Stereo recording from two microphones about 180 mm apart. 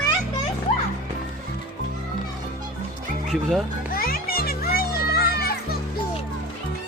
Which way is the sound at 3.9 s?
55° left (ahead or behind).